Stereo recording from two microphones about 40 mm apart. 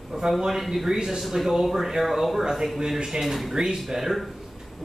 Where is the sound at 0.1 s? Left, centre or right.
Centre.